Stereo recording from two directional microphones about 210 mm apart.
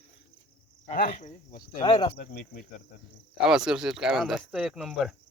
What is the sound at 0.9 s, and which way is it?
Speech, 35° left (ahead or behind).